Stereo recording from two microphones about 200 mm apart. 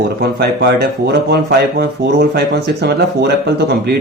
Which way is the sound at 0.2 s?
55° right (ahead or behind).